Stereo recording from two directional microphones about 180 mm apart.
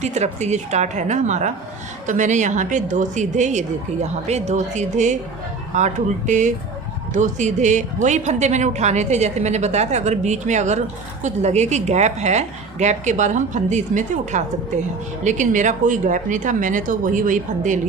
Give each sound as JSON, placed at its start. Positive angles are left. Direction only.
{"t": 0.0, "sound": "a woman's voice", "side_deg": -40}